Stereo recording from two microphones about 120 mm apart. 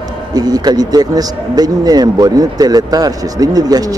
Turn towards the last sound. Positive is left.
turn(degrees=-30)  # may be behind; listen again after turning